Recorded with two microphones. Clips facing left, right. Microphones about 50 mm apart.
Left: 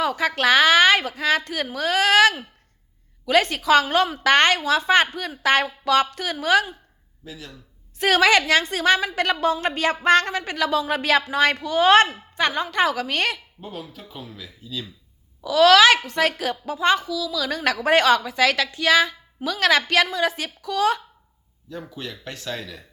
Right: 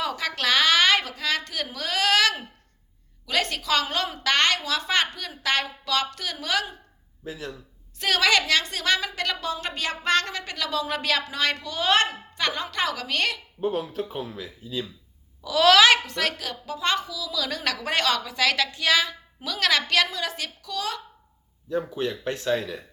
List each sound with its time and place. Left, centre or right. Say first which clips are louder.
0.0 s a woman's voice: left 6 dB; centre
3.4 s speech: left 7 dB; centre
7.3 s speech: right 4 dB; right
7.9 s speech: left 5 dB; left
11.8 s speech: left 7 dB; left
12.4 s a woman's voice: left 6 dB; centre
13.6 s speech: right 9 dB; right
14.6 s speech: right 2 dB; right
15.4 s a child's voice: left 3 dB; centre
16.4 s a woman's voice: left 6 dB; centre
17.0 s a child's voice: left 4 dB; centre
17.6 s a woman's voice: left 9 dB; centre
20.6 s speech: left 11 dB; left
21.8 s speech: right 7 dB; right